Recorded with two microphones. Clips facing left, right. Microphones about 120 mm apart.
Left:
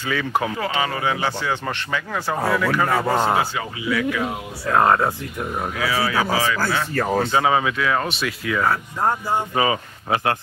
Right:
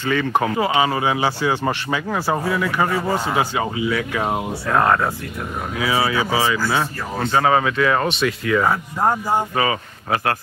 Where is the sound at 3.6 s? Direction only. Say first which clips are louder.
Right 2 dB; 30° right (ahead or behind).